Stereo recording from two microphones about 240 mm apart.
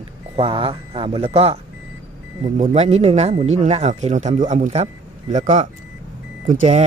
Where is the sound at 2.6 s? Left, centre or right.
Right.